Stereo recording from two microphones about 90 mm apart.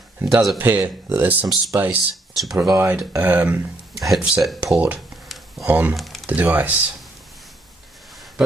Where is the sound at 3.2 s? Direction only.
15° right (ahead or behind).